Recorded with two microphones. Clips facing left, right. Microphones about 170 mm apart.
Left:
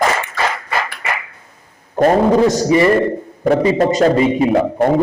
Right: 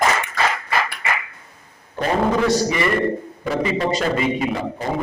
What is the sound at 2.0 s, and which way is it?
A man's voice, 45° left (ahead or behind).